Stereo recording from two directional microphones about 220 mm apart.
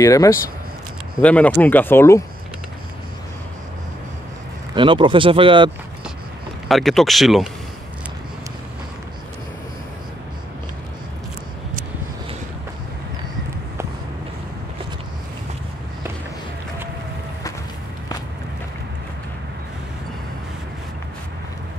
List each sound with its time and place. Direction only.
0.0 s speech: 15° left (ahead or behind)
4.7 s speech: 20° right (ahead or behind)
6.7 s speech: centre (ahead or behind)